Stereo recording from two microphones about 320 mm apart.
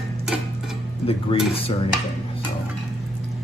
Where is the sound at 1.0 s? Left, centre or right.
Centre.